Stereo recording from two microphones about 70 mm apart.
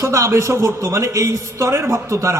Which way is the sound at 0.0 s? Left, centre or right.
Right.